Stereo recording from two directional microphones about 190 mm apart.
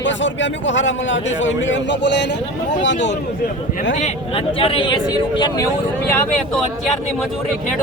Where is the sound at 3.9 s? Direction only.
30° left (ahead or behind).